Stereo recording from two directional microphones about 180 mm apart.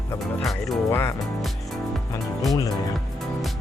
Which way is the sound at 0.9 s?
15° left (ahead or behind).